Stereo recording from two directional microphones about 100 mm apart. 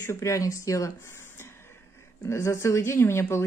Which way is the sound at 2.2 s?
30° left (ahead or behind).